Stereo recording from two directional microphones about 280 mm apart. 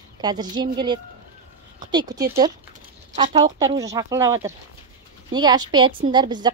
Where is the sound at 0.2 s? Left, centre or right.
Centre.